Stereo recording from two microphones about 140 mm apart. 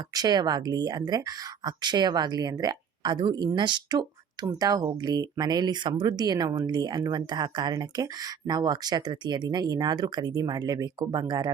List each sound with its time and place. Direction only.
0.1 s speech: 30° right (ahead or behind)